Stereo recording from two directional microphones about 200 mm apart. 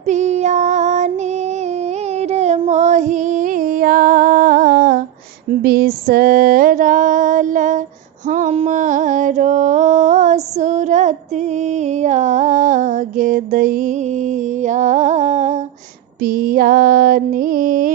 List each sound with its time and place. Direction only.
0.0 s child singing: 35° right (ahead or behind)
2.1 s female singing: 35° right (ahead or behind)
8.3 s mantra: 35° right (ahead or behind)
16.2 s music: 45° right (ahead or behind)